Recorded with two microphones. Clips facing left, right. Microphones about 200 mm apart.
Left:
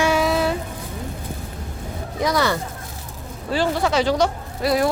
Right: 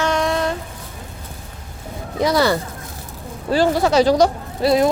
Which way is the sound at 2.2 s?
30° right (ahead or behind).